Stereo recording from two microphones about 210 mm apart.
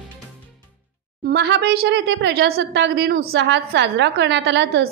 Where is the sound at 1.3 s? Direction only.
55° right (ahead or behind).